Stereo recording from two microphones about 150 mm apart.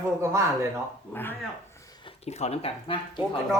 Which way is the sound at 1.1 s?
15° left (ahead or behind).